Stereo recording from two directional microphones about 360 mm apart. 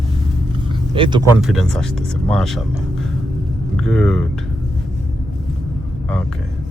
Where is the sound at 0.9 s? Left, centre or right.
Centre.